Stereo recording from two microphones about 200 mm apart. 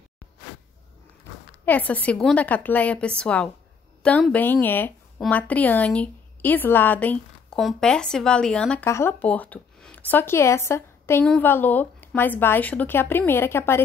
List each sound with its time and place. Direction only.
1.7 s speech: 10° left (ahead or behind)